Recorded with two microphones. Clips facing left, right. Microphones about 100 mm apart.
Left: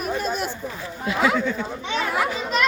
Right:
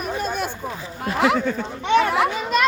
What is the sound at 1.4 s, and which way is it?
Speech, 45° right (ahead or behind).